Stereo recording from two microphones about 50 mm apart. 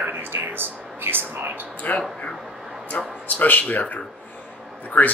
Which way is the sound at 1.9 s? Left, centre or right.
Left.